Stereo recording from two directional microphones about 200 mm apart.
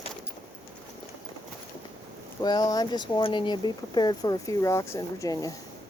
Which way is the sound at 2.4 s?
20° left (ahead or behind).